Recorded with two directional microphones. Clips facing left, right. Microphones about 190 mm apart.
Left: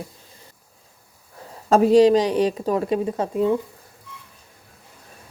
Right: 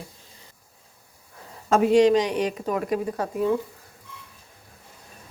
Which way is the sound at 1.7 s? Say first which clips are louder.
Left 3 dB; 35° left (ahead or behind).